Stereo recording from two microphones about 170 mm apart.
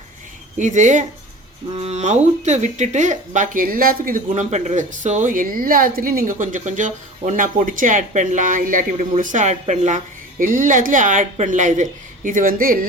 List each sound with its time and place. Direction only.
0.6 s speech: 45° right (ahead or behind)